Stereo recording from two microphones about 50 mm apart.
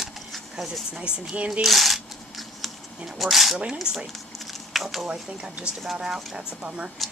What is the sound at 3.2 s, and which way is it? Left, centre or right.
Speech, centre.